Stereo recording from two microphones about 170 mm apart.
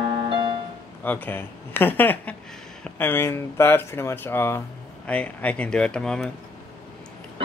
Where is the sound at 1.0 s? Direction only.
10° left (ahead or behind).